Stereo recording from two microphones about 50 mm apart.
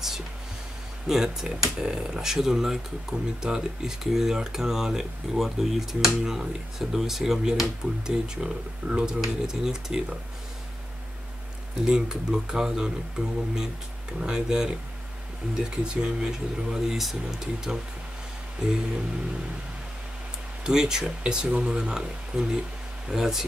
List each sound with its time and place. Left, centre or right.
1.0 s speech: centre
11.8 s speech: centre
20.6 s speech: centre